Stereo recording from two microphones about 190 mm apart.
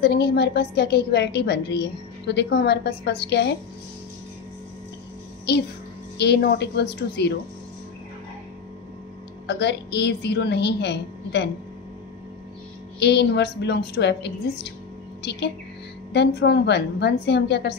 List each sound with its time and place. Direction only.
0.0 s a woman's voice: 60° left (ahead or behind)
5.5 s a woman's voice: 60° left (ahead or behind)
9.5 s a woman's voice: 60° left (ahead or behind)
13.0 s a woman's voice: 65° left (ahead or behind)
16.1 s a woman's voice: 65° left (ahead or behind)